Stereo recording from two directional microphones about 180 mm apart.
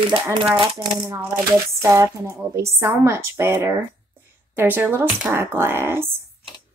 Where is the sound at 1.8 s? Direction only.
15° right (ahead or behind).